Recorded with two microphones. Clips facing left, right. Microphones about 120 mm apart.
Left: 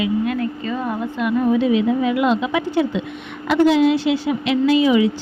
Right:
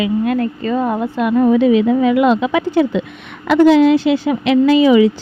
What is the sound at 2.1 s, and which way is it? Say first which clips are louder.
A woman's voice: right 5 dB; 60° right (ahead or behind).